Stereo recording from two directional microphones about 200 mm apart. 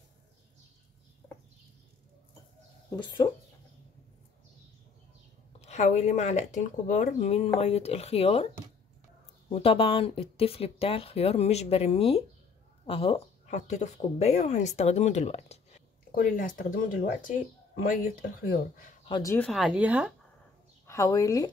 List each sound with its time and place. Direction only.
3.2 s speech: 20° left (ahead or behind)
5.6 s speech: 35° left (ahead or behind)
9.5 s speech: 30° left (ahead or behind)
16.2 s speech: 45° left (ahead or behind)
18.2 s speech: 50° left (ahead or behind)
19.0 s speech: 25° left (ahead or behind)
19.3 s speech: centre (ahead or behind)
20.8 s speech: 15° left (ahead or behind)